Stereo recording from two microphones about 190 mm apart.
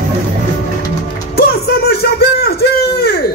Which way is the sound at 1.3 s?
55° left (ahead or behind).